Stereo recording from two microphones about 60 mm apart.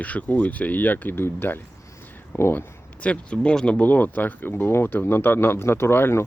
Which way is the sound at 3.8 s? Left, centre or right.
Left.